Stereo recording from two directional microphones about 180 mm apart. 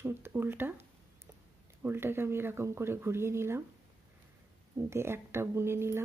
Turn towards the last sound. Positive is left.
turn(degrees=-15)  # may be behind; listen again after turning